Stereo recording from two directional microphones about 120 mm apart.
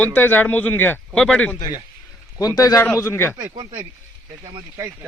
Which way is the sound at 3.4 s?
35° right (ahead or behind).